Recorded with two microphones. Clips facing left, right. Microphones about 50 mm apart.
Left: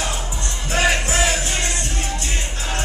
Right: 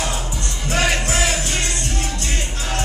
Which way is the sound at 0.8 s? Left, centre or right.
Centre.